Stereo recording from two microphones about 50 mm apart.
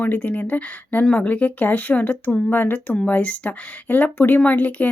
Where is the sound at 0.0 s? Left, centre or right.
Left.